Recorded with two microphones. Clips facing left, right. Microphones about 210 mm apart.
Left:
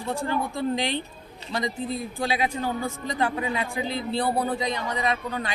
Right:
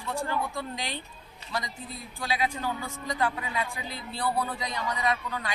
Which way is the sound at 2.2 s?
25° left (ahead or behind).